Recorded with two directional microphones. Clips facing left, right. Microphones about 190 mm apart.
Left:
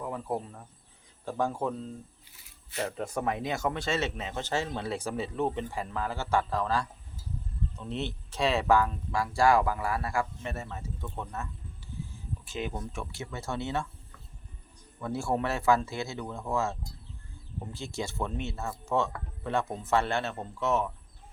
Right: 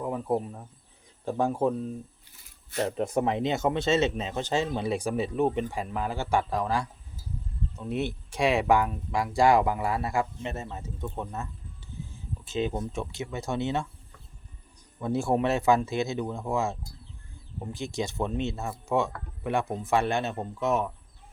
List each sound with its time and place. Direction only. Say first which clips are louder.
0.0 s speech: right 5 dB; 20° right (ahead or behind)
12.5 s speech: right 7 dB; 25° right (ahead or behind)
15.0 s speech: right 5 dB; 20° right (ahead or behind)